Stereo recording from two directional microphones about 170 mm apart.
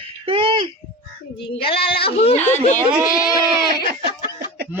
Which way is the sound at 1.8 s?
75° left (ahead or behind).